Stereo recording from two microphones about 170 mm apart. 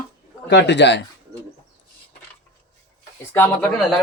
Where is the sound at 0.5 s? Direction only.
90° left.